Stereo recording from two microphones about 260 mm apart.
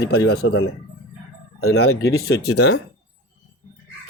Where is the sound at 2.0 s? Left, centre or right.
Left.